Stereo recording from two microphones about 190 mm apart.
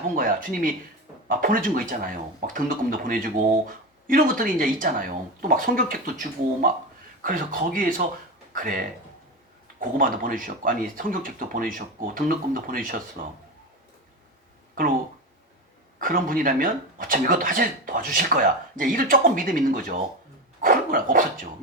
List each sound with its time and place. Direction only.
0.2 s speech: 45° right (ahead or behind)
10.0 s speech: 45° right (ahead or behind)
16.0 s speech: 45° right (ahead or behind)